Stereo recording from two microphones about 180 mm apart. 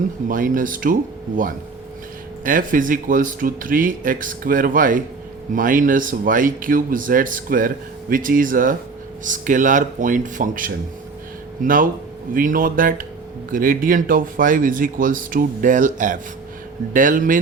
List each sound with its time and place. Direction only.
0.3 s speech: 50° right (ahead or behind)
2.4 s speech: 50° right (ahead or behind)